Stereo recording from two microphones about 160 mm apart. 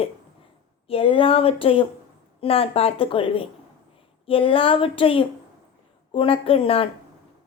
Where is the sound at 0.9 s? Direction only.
35° left (ahead or behind).